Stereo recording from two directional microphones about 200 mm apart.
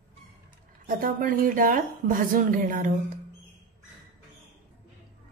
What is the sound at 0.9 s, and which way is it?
A woman's voice, 45° right (ahead or behind).